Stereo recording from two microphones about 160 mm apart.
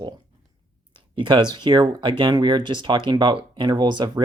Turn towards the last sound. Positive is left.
turn(degrees=-25)  # may be behind; listen again after turning